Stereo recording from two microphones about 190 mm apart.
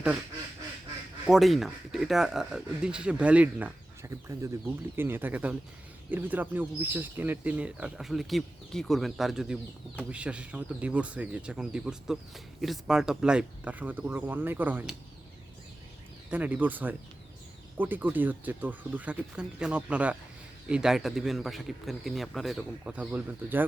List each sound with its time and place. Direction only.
1.3 s speech: centre (ahead or behind)
16.3 s speech: 10° right (ahead or behind)